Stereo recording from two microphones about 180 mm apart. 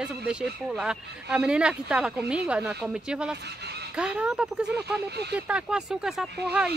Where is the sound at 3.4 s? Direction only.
65° right (ahead or behind).